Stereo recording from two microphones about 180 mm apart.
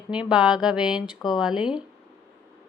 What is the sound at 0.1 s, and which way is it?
Speech, 5° right (ahead or behind).